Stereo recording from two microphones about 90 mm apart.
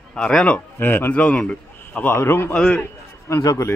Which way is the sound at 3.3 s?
35° left (ahead or behind).